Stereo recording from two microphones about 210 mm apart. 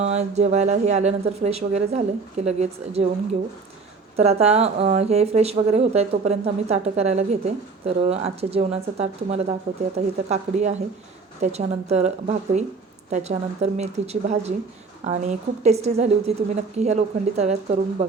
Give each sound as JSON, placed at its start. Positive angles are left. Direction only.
{"t": 0.0, "sound": "speech", "side_deg": -30}
{"t": 4.2, "sound": "speech", "side_deg": -30}